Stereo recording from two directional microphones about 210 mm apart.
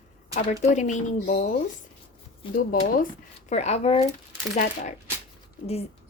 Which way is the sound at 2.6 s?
40° left (ahead or behind).